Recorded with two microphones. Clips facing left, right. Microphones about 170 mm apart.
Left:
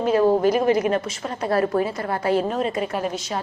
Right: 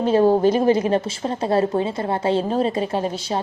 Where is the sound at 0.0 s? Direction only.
30° right (ahead or behind).